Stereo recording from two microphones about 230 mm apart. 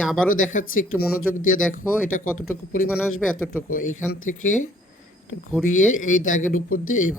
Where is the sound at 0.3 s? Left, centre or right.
Left.